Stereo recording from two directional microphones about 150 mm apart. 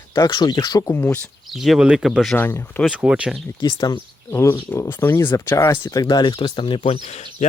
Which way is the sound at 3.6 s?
35° left (ahead or behind).